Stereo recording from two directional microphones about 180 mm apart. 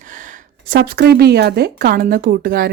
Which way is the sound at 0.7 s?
60° right (ahead or behind).